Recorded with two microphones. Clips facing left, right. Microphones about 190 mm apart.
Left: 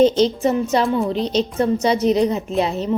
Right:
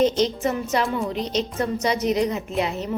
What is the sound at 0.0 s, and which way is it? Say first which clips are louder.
A woman's voice: left 5 dB; 30° left (ahead or behind).